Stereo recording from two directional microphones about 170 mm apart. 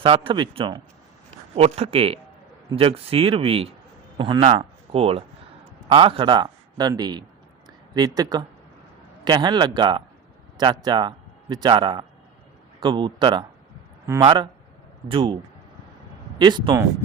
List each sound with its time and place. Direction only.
0.3 s a man's voice: 30° right (ahead or behind)
15.0 s speech: 30° right (ahead or behind)
16.4 s speech: 25° right (ahead or behind)